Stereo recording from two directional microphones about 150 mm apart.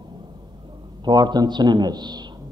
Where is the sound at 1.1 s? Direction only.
25° right (ahead or behind).